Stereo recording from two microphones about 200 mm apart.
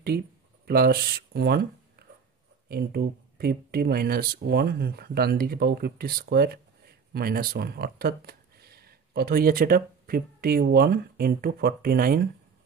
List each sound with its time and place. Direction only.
0.7 s speech: 50° right (ahead or behind)